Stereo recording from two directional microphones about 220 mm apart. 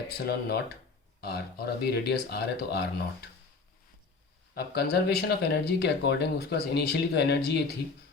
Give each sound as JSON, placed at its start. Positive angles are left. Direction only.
{"t": 0.3, "sound": "speech", "side_deg": 45}
{"t": 4.5, "sound": "speech", "side_deg": 45}